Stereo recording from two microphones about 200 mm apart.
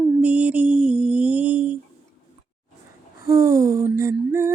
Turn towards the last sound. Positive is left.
turn(degrees=-15)  # may be behind; listen again after turning